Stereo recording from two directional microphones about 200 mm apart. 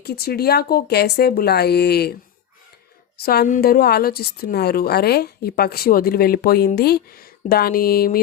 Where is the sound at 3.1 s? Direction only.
50° left (ahead or behind).